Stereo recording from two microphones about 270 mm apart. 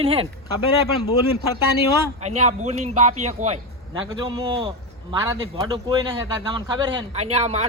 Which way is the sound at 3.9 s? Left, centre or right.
Centre.